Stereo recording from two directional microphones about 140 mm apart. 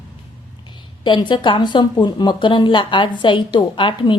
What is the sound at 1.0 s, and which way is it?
A woman's voice, 35° left (ahead or behind).